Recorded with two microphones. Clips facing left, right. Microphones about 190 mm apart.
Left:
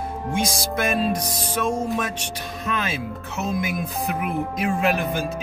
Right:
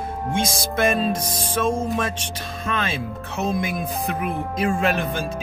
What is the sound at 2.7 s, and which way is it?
Speech, 10° left (ahead or behind).